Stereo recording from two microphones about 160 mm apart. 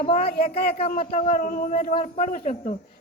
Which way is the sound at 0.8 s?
55° left (ahead or behind).